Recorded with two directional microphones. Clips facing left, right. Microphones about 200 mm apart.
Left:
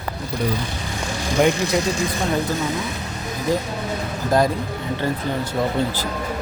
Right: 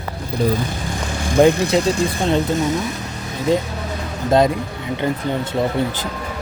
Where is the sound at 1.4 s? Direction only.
30° right (ahead or behind).